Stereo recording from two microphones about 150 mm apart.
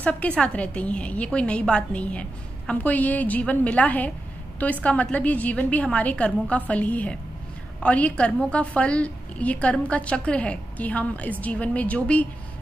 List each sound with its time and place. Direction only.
0.4 s a woman's voice: 10° left (ahead or behind)